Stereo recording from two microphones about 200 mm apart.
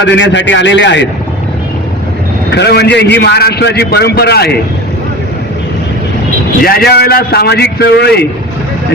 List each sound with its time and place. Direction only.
0.0 s a man's voice: 65° left (ahead or behind)
2.5 s a man's voice: 55° left (ahead or behind)
6.6 s a man's voice: 50° left (ahead or behind)